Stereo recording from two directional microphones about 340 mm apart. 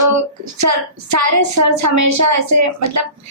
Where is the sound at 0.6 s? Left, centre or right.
Right.